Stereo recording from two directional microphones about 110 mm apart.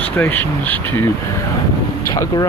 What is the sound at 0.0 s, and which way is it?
Speech, 15° left (ahead or behind).